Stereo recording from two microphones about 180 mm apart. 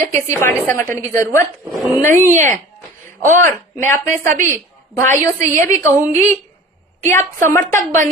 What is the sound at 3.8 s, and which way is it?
Speech, 45° right (ahead or behind).